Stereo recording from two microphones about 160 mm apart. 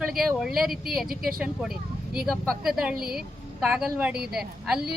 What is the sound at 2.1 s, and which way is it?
Speech, centre (ahead or behind).